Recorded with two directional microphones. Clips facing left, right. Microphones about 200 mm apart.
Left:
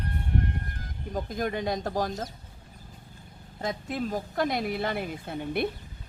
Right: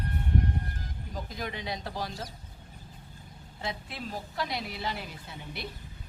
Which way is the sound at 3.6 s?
45° left (ahead or behind).